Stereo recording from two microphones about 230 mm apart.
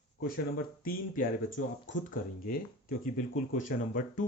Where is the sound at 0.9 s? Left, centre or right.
Left.